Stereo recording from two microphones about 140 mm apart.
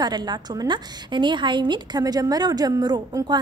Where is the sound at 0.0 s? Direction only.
30° right (ahead or behind).